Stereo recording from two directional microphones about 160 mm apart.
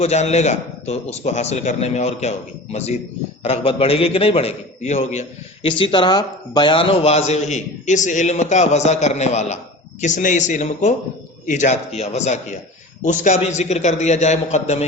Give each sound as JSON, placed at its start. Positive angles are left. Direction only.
{"t": 0.0, "sound": "a man's voice", "side_deg": 40}
{"t": 3.4, "sound": "a man's voice", "side_deg": 40}
{"t": 5.6, "sound": "a man's voice", "side_deg": 30}